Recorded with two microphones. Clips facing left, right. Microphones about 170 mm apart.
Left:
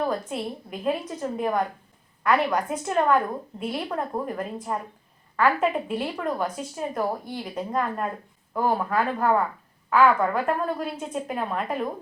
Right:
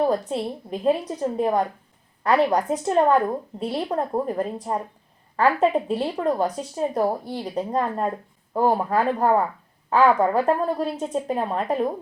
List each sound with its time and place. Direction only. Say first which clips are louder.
0.0 s speech: right 5 dB; 35° right (ahead or behind)